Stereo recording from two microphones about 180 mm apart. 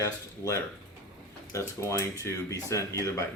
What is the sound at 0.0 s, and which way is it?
Speech, 15° left (ahead or behind).